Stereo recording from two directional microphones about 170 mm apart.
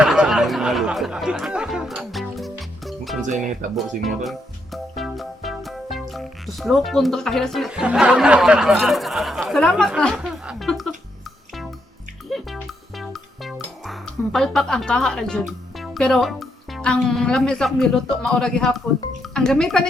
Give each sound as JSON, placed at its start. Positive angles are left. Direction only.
{"t": 0.0, "sound": "music", "side_deg": -5}
{"t": 3.2, "sound": "speech", "side_deg": -50}
{"t": 3.8, "sound": "speech", "side_deg": 0}
{"t": 12.3, "sound": "music", "side_deg": 0}
{"t": 19.2, "sound": "speech", "side_deg": 5}